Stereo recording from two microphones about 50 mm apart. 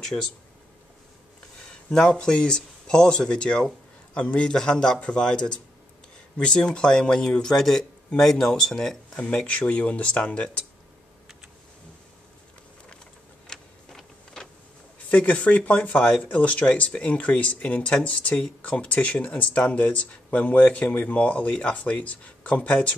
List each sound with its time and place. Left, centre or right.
0.0 s speech: centre
1.7 s speech: centre
9.2 s speech: left
13.5 s a sound: centre
15.0 s speech: left